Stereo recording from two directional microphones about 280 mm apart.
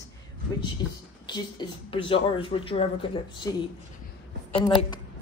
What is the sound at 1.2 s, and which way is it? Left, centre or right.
Speech, centre.